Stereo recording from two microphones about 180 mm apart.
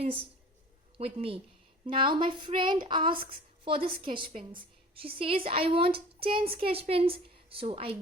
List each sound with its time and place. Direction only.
0.9 s speech: 30° right (ahead or behind)